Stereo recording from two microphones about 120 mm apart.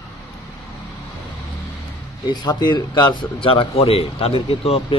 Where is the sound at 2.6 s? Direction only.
40° left (ahead or behind).